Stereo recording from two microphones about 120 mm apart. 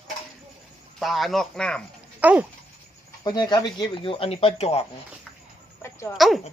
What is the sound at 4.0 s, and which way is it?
Speech, 50° left (ahead or behind).